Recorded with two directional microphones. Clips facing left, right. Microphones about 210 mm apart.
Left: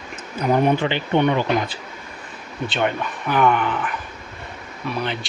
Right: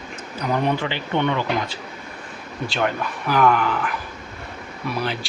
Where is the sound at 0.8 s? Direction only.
15° left (ahead or behind).